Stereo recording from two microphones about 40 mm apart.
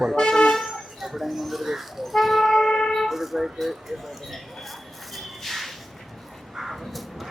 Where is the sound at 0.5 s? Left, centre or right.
Centre.